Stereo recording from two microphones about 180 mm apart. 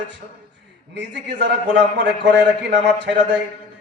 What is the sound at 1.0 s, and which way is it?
A man's voice, 75° right (ahead or behind).